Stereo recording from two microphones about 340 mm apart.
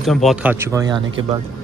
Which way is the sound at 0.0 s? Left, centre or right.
Centre.